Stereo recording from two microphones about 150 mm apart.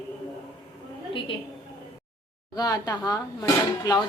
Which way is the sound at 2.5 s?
25° left (ahead or behind).